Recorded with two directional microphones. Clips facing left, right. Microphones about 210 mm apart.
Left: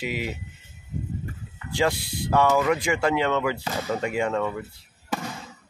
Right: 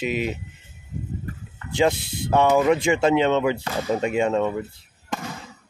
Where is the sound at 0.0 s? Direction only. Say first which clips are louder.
Right 5 dB; 20° right (ahead or behind).